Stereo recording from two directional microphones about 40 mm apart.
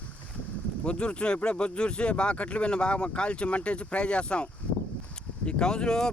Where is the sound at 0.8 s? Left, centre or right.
Left.